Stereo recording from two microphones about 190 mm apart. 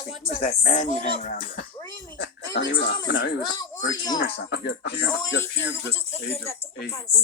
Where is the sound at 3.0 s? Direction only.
85° left.